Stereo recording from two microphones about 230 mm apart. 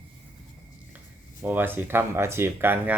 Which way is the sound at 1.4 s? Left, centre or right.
Centre.